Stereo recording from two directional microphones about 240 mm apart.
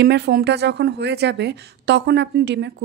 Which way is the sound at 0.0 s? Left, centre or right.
Right.